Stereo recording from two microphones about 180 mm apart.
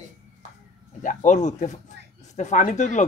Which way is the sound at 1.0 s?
45° left (ahead or behind).